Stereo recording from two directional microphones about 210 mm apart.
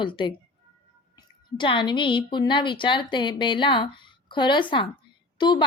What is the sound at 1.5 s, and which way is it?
Speech, 20° left (ahead or behind).